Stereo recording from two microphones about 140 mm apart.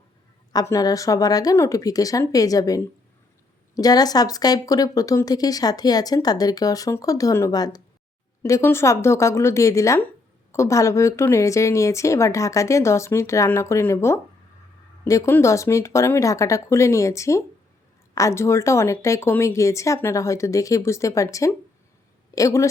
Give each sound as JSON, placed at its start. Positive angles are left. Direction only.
{"t": 0.5, "sound": "speech", "side_deg": 25}